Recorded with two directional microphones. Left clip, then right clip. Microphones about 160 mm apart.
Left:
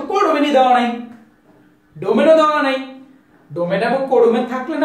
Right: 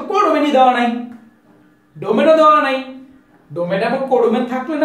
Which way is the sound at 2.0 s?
15° right (ahead or behind).